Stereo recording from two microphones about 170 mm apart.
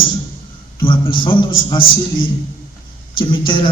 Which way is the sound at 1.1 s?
30° left (ahead or behind).